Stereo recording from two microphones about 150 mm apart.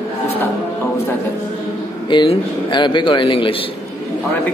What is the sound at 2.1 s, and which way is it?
Speech, 30° left (ahead or behind).